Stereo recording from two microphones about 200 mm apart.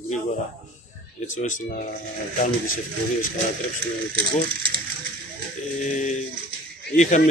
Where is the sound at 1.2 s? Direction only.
40° left (ahead or behind).